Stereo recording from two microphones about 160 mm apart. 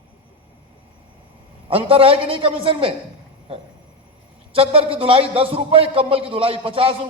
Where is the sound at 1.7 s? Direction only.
35° right (ahead or behind).